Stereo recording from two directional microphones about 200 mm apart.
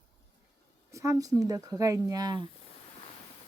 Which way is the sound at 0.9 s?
15° right (ahead or behind).